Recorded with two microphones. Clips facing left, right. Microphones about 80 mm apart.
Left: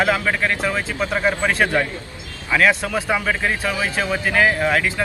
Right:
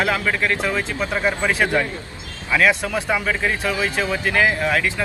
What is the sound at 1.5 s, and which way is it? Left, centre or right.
A man's voice, centre.